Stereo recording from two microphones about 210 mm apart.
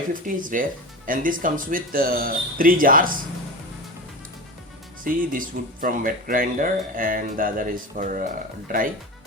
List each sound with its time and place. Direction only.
0.1 s speech: 40° right (ahead or behind)
5.0 s speech: 40° right (ahead or behind)